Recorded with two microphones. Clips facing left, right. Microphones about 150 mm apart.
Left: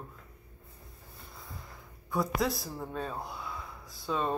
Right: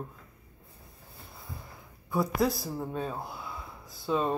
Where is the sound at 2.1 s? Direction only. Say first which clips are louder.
Right 3 dB; centre (ahead or behind).